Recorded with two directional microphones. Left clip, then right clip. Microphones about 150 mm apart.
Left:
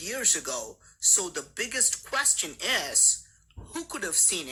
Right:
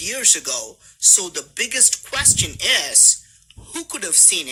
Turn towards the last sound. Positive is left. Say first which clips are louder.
# right 9 dB
turn(degrees=-30)  # may be behind; listen again after turning